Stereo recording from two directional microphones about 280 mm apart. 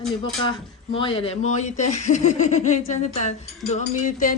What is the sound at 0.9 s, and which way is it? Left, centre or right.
Speech, centre.